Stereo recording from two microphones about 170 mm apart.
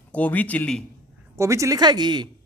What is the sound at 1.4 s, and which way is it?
Speech, 15° right (ahead or behind).